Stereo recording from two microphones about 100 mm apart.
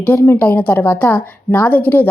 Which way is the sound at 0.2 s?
20° left (ahead or behind).